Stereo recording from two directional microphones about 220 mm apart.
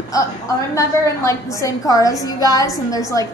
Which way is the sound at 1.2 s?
15° left (ahead or behind).